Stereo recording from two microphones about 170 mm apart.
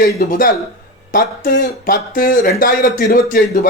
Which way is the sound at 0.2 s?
55° left (ahead or behind).